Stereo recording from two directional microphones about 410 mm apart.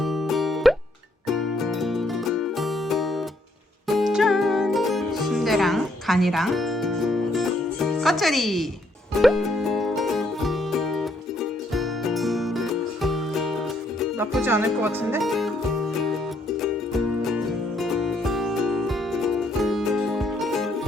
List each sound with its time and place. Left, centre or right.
0.0 s music: centre